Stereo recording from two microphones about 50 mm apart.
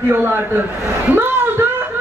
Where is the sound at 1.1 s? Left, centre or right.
Right.